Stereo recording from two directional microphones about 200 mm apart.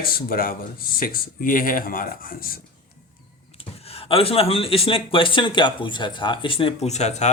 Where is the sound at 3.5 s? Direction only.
30° left (ahead or behind).